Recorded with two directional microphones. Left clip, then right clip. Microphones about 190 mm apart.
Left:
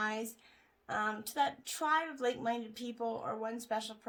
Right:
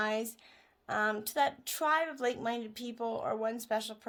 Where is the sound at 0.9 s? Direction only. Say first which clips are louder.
Right 4 dB; 45° right (ahead or behind).